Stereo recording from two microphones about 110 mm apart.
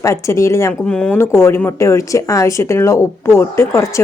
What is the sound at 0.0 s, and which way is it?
Speech, 25° left (ahead or behind).